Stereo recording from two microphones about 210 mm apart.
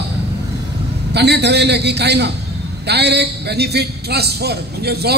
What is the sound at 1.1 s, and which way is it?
A man's voice, 55° right (ahead or behind).